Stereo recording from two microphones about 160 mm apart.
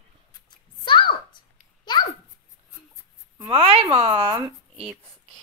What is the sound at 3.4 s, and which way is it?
Speech, 30° right (ahead or behind).